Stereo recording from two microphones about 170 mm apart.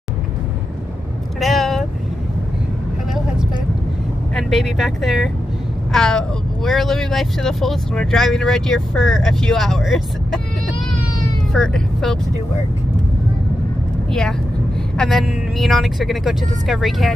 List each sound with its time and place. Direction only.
1.4 s vehicle: centre (ahead or behind)
4.4 s speech: centre (ahead or behind)
11.5 s speech: 5° left (ahead or behind)
15.0 s speech: centre (ahead or behind)